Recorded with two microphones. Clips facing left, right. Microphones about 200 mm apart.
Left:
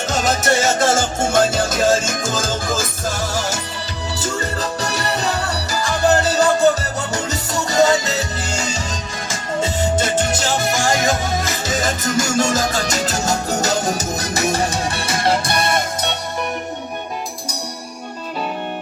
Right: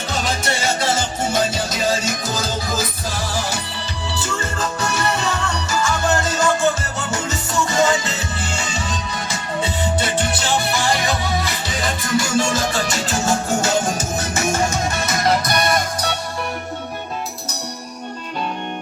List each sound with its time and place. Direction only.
0.1 s music: 45° left (ahead or behind)
4.1 s music: 40° left (ahead or behind); by 16.1 s 25° left (ahead or behind)